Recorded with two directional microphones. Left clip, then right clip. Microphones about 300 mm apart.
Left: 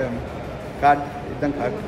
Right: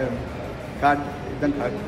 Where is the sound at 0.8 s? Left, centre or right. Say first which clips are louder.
Left 3 dB; centre.